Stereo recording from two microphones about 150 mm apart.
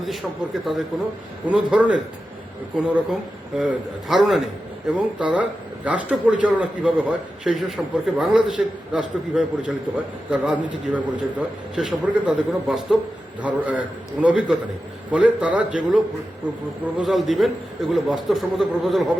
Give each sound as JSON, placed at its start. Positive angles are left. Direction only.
{"t": 0.0, "sound": "a man's voice", "side_deg": 0}